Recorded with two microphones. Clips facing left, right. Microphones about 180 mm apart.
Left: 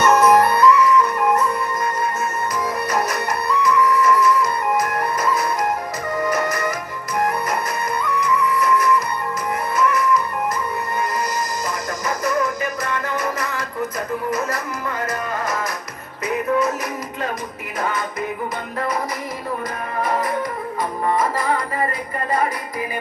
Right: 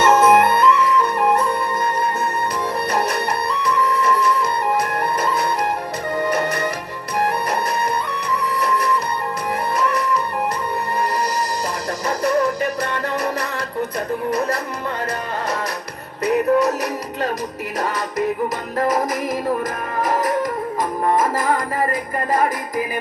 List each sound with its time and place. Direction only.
0.0 s music: 25° right (ahead or behind)
2.9 s music: 30° right (ahead or behind)
6.1 s music: 30° right (ahead or behind)
8.0 s music: 35° right (ahead or behind)
12.0 s music: 35° right (ahead or behind)
16.2 s music: 35° right (ahead or behind)
18.8 s music: 45° right (ahead or behind)
20.1 s music: 40° right (ahead or behind)